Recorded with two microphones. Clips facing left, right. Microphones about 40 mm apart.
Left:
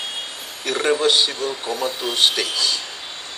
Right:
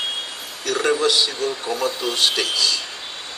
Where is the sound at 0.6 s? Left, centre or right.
Left.